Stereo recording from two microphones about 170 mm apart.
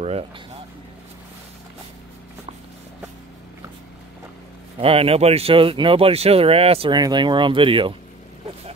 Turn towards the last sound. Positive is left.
turn(degrees=-30)  # may be behind; listen again after turning